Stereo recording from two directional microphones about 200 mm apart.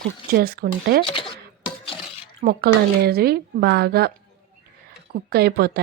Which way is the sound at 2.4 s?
50° right (ahead or behind).